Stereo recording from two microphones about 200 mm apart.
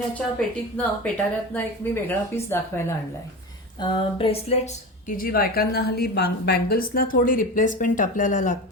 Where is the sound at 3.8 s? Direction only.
30° left (ahead or behind).